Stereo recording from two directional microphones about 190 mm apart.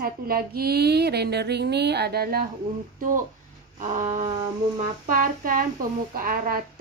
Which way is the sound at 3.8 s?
40° right (ahead or behind).